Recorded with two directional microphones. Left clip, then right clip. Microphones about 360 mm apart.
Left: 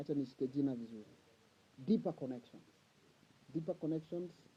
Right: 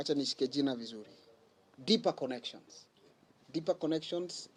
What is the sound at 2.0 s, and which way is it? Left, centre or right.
Speech, centre.